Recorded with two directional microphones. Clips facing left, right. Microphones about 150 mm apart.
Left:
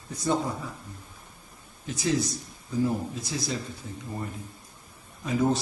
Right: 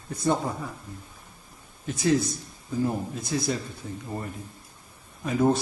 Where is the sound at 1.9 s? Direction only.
55° right (ahead or behind).